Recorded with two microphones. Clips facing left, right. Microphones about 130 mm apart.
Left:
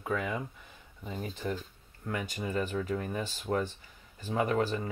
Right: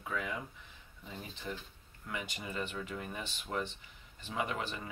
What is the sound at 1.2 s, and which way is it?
Speech, 45° left (ahead or behind).